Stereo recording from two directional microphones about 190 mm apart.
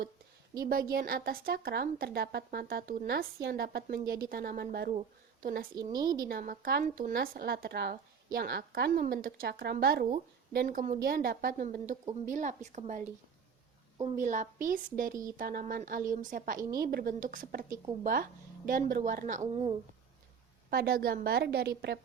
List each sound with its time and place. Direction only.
0.6 s speech: 50° right (ahead or behind)
5.7 s a woman's voice: 20° right (ahead or behind)
6.2 s a woman's voice: 50° right (ahead or behind)
20.7 s a woman's voice: 55° right (ahead or behind)